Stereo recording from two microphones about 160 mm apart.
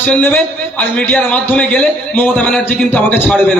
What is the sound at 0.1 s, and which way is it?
A man's voice, 10° left (ahead or behind).